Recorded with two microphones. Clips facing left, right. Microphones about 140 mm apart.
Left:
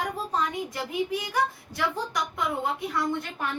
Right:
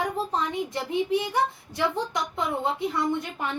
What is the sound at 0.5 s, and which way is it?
A child's voice, 25° right (ahead or behind).